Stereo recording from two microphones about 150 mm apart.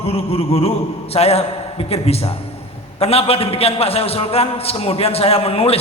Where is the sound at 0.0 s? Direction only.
40° left (ahead or behind).